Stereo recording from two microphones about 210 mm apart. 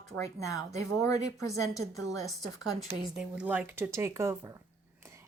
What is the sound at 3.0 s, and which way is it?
Speech, 5° right (ahead or behind).